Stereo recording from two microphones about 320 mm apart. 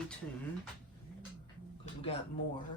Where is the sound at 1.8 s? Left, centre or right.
Centre.